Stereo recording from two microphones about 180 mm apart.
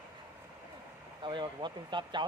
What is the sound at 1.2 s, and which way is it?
Speech, 25° right (ahead or behind).